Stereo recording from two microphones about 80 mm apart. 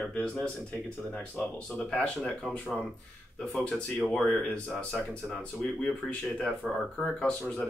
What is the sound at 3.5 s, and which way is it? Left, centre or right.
Speech, centre.